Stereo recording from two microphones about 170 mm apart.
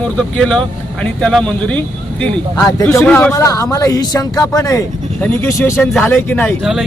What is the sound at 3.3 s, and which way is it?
Speech, 20° left (ahead or behind).